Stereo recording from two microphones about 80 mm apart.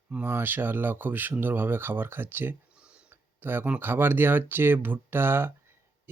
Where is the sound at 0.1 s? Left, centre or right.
Right.